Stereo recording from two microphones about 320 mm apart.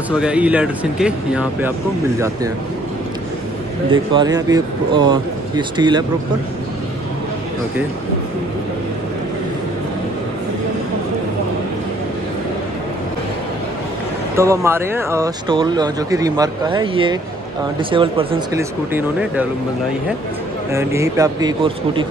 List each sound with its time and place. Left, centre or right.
0.1 s speech: centre
3.9 s speech: centre
14.3 s speech: centre
18.9 s speech: centre
20.7 s speech: centre